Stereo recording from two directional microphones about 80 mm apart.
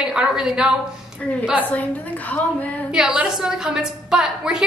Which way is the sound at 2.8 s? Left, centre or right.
Centre.